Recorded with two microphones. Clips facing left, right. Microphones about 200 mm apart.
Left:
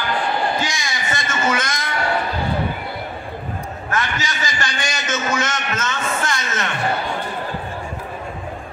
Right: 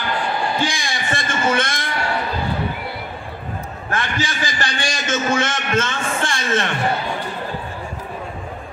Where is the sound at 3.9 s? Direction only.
30° right (ahead or behind).